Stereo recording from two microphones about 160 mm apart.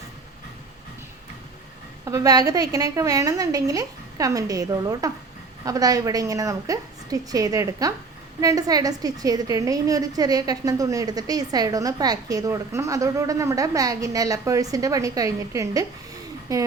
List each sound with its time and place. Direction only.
2.0 s a woman's voice: 20° right (ahead or behind)